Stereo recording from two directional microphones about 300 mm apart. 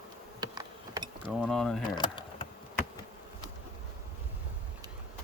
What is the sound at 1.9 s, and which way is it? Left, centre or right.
Keys jangling, centre.